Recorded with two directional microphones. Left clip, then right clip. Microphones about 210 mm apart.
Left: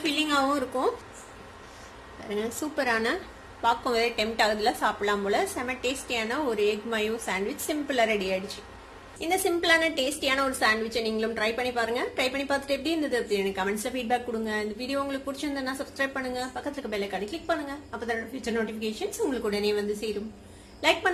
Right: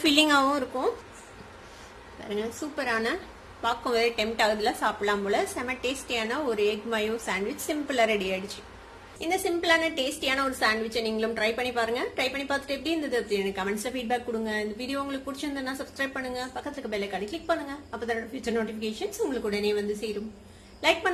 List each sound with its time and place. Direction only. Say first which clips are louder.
0.2 s a woman's voice: right 2 dB; 20° right (ahead or behind)
0.7 s a woman's voice: left 1 dB; centre (ahead or behind)
2.2 s a woman's voice: left 1 dB; 5° left (ahead or behind)
9.2 s a woman's voice: left 1 dB; 5° left (ahead or behind)